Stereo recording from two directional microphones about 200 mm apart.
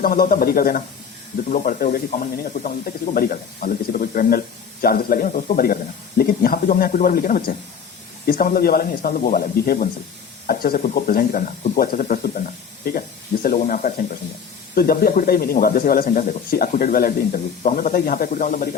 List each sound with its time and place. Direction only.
0.0 s speech: 45° left (ahead or behind)